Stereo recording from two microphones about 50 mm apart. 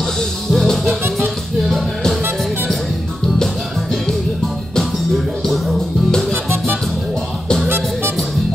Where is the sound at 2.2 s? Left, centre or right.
Right.